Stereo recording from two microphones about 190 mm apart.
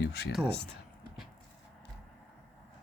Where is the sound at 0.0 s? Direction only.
60° left (ahead or behind).